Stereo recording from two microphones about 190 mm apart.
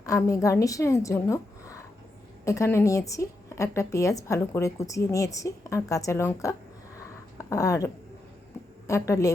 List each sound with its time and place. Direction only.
0.0 s a woman's voice: 15° left (ahead or behind)
8.9 s a woman's voice: 15° left (ahead or behind)